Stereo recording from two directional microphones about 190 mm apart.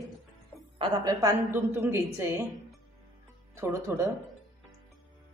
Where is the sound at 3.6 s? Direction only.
15° right (ahead or behind).